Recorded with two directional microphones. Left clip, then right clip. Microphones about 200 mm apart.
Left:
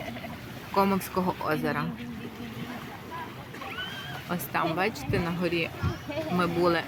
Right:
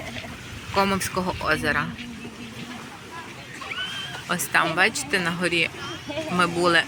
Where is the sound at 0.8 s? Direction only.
10° left (ahead or behind).